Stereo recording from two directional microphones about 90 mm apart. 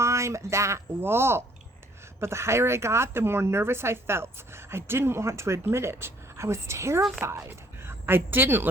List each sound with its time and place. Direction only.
0.0 s a woman's voice: 30° right (ahead or behind)